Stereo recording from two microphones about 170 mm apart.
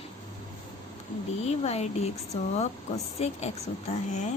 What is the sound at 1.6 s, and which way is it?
A woman's voice, 40° left (ahead or behind).